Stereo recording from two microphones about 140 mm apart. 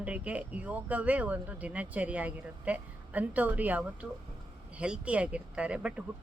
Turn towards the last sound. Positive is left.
turn(degrees=-10)  # may be behind; listen again after turning